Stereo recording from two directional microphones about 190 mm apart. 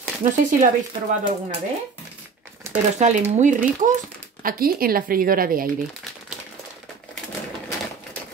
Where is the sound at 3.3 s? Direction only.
40° right (ahead or behind).